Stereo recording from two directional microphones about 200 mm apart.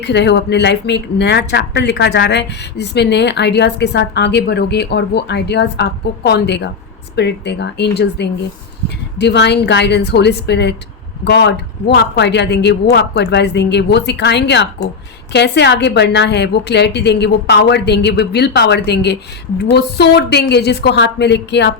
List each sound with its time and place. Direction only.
0.0 s speech: 60° left (ahead or behind)